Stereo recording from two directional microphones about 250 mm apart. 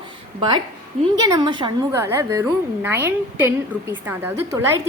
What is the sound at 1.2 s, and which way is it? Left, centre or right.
A woman's voice, centre.